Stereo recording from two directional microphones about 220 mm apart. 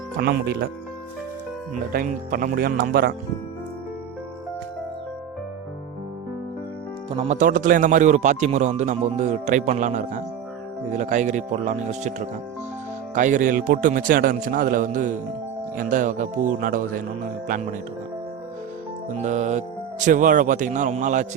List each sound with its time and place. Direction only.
0.2 s speech: 45° right (ahead or behind)
1.7 s speech: 40° right (ahead or behind)
7.2 s speech: 35° right (ahead or behind)
13.1 s speech: 35° right (ahead or behind)
19.1 s speech: 30° right (ahead or behind)